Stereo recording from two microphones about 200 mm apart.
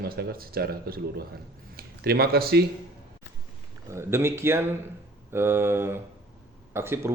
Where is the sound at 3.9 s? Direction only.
15° right (ahead or behind).